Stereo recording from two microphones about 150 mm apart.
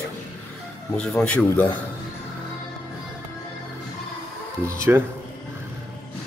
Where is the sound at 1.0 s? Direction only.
5° left (ahead or behind).